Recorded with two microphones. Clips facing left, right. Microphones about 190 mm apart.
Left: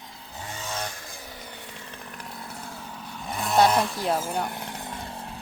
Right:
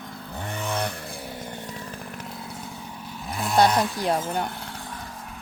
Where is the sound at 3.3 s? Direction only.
Centre (ahead or behind).